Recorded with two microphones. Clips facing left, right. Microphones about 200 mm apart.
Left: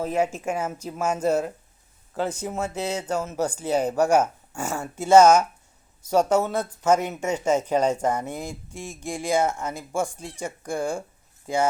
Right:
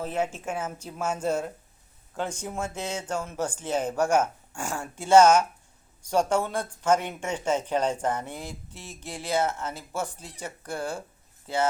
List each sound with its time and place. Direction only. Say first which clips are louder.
0.0 s speech: left 5 dB; 10° left (ahead or behind)
8.4 s speech: left 5 dB; 45° left (ahead or behind)
8.8 s speech: left 8 dB; 10° left (ahead or behind)